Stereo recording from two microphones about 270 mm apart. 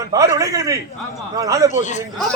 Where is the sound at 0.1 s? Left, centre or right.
Centre.